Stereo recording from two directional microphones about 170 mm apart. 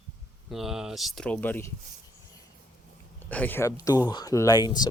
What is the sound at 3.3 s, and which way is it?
Speech, 10° left (ahead or behind).